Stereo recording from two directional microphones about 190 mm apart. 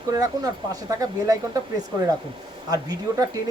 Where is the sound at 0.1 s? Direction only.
20° right (ahead or behind).